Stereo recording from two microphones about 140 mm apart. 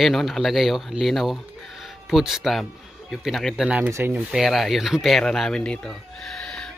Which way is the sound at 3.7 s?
15° right (ahead or behind).